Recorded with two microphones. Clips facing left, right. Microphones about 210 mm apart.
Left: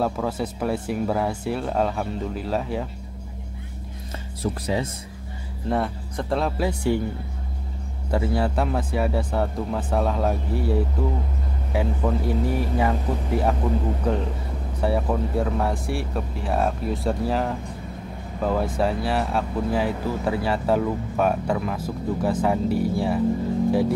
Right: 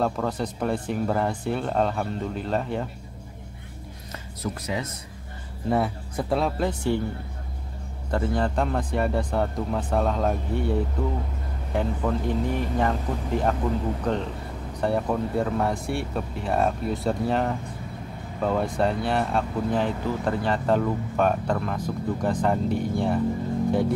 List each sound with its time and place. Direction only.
0.0 s speech: 5° left (ahead or behind)
4.4 s speech: 30° left (ahead or behind)
5.7 s speech: 5° right (ahead or behind)
8.1 s speech: 10° left (ahead or behind)